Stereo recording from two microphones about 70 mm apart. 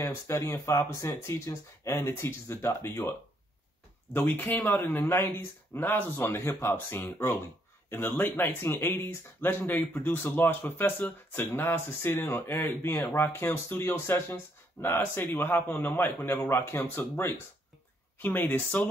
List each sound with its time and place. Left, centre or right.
0.0 s speech: left
4.1 s speech: left